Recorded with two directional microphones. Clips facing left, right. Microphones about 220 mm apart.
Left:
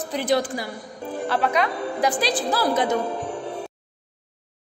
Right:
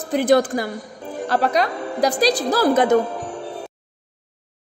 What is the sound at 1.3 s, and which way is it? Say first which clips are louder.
A woman's voice: right 3 dB; 40° right (ahead or behind).